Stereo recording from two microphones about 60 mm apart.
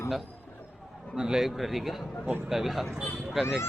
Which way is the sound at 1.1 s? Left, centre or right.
Centre.